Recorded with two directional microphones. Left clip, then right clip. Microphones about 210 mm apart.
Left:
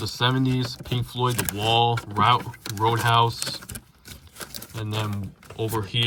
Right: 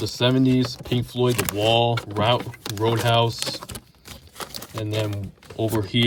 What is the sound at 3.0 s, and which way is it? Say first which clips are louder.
Speech: left 1 dB; 20° right (ahead or behind).